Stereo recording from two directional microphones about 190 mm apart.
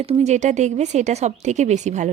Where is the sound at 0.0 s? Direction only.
35° right (ahead or behind).